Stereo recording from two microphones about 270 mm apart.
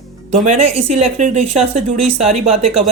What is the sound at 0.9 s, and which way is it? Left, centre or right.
Speech, right.